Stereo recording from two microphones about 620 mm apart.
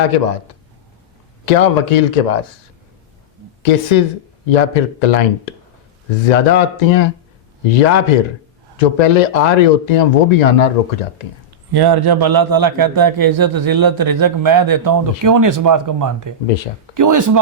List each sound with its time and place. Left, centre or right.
0.0 s speech: left
3.6 s speech: left
11.7 s a man's voice: right